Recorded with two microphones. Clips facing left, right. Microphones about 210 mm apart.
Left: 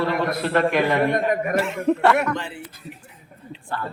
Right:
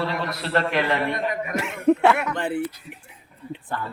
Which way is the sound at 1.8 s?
5° right (ahead or behind).